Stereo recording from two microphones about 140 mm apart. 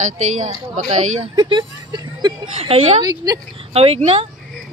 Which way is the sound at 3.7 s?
45° right (ahead or behind).